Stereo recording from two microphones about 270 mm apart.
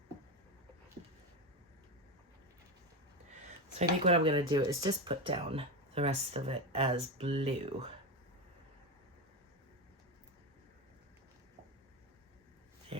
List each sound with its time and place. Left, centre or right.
3.8 s speech: right